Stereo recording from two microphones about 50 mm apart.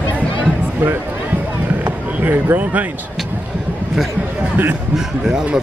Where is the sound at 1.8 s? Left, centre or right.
Right.